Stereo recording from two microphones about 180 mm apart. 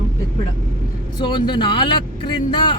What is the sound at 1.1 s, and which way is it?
Speech, 25° left (ahead or behind).